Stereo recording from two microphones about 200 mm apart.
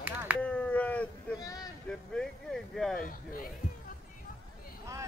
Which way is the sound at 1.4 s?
20° left (ahead or behind).